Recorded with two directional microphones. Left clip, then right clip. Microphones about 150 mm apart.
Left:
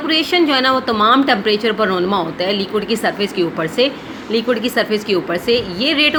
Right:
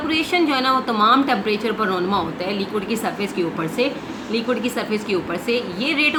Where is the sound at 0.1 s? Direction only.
30° left (ahead or behind).